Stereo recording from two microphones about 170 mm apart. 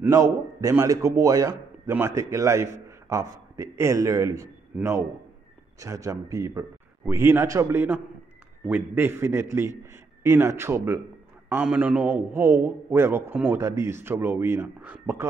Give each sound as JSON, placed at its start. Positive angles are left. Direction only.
{"t": 0.0, "sound": "a man's voice", "side_deg": -20}